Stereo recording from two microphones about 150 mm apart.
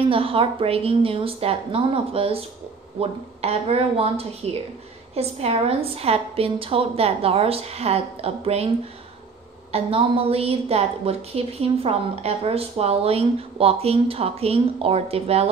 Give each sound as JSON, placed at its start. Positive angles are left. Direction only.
{"t": 0.1, "sound": "a woman's voice", "side_deg": -40}
{"t": 9.7, "sound": "a woman's voice", "side_deg": -40}